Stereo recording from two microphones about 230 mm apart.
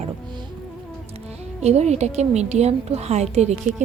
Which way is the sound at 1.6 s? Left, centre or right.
Right.